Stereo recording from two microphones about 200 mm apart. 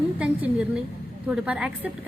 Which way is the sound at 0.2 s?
5° right (ahead or behind).